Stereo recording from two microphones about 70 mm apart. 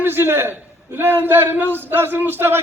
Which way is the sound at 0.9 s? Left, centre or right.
Right.